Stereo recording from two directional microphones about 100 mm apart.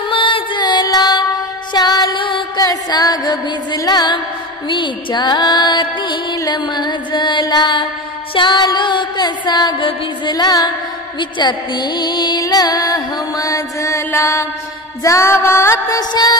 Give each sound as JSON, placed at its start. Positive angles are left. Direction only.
{"t": 0.1, "sound": "music", "side_deg": 60}
{"t": 2.6, "sound": "music", "side_deg": 40}
{"t": 4.6, "sound": "music", "side_deg": 55}
{"t": 16.0, "sound": "music", "side_deg": 45}